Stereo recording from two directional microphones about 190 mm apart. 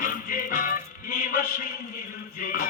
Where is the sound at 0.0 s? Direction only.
45° left (ahead or behind).